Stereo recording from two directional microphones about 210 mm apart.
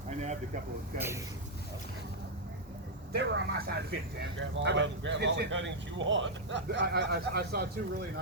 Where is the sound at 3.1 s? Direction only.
50° right (ahead or behind).